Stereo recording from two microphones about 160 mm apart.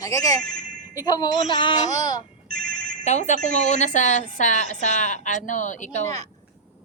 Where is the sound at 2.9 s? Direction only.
45° left (ahead or behind).